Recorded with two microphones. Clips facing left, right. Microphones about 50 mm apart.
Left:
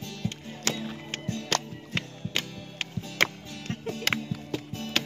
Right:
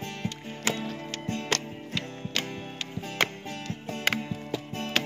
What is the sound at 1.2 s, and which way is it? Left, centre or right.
Music, right.